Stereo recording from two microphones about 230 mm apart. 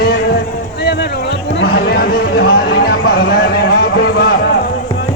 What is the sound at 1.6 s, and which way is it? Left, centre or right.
Speech, left.